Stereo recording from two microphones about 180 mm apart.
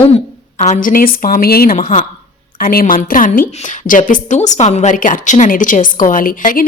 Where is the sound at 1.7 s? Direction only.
40° left (ahead or behind).